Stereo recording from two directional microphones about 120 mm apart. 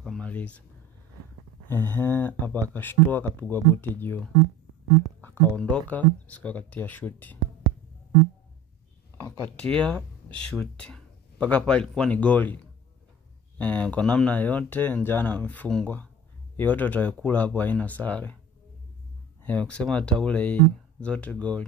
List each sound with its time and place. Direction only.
0.0 s a sound: 10° left (ahead or behind)
1.7 s speech: 20° left (ahead or behind)
5.6 s speech: 15° left (ahead or behind)
9.6 s speech: 10° left (ahead or behind)
13.6 s speech: 10° left (ahead or behind)
19.4 s speech: 10° left (ahead or behind)